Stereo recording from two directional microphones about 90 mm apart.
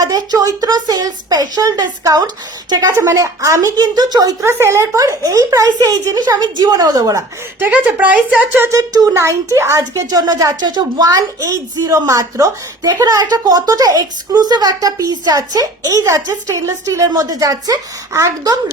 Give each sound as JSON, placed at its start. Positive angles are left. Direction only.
{"t": 0.0, "sound": "speech", "side_deg": -45}
{"t": 2.9, "sound": "speech", "side_deg": -35}
{"t": 3.8, "sound": "speech", "side_deg": -50}
{"t": 4.4, "sound": "speech", "side_deg": -25}
{"t": 7.6, "sound": "speech", "side_deg": -15}
{"t": 8.8, "sound": "speech", "side_deg": -40}